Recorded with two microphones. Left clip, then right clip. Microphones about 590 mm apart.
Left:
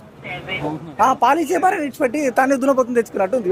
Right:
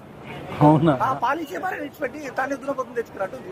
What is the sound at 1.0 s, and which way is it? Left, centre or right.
Speech, left.